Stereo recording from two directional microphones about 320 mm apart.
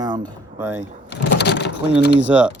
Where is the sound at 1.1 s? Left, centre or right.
Left.